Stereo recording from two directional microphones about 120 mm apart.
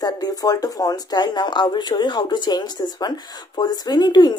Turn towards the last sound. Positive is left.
turn(degrees=35)  # may be behind; listen again after turning